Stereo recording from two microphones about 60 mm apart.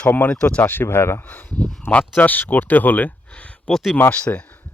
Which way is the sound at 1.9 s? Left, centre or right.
Left.